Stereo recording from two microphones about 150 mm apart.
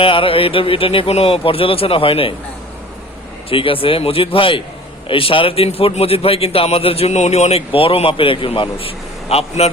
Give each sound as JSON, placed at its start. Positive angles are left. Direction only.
{"t": 0.0, "sound": "a man's voice", "side_deg": 35}
{"t": 3.5, "sound": "a man's voice", "side_deg": 35}